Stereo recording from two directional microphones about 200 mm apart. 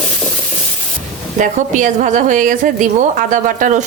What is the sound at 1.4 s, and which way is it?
Speech, 40° right (ahead or behind).